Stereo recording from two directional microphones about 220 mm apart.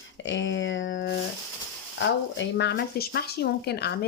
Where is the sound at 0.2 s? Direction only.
60° left (ahead or behind).